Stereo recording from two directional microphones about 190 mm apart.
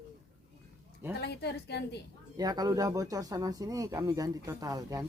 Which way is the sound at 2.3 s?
20° right (ahead or behind).